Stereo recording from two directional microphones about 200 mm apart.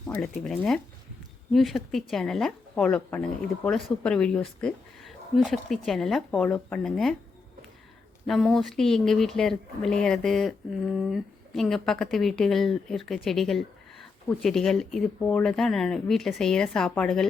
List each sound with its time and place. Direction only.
0.1 s a woman's voice: 5° left (ahead or behind)
8.3 s a woman's voice: centre (ahead or behind)